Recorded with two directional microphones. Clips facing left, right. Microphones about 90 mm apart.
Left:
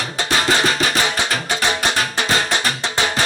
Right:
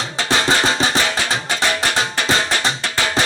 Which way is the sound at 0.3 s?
25° right (ahead or behind).